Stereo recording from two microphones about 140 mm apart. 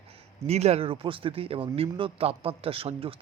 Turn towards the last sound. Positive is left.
turn(degrees=-40)  # may be behind; listen again after turning